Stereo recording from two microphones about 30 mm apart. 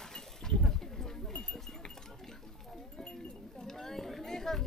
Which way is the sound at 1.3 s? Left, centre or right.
Left.